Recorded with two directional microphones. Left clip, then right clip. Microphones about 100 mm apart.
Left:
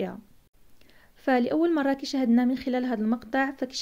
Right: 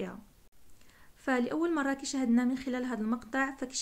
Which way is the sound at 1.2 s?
30° left (ahead or behind).